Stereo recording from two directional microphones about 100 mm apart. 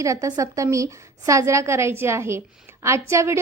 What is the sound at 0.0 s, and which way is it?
A woman's voice, 35° right (ahead or behind).